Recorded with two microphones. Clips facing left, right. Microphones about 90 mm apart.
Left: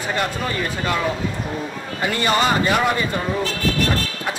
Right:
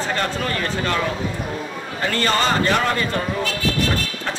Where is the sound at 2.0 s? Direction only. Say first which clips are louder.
Left 1 dB; 15° left (ahead or behind).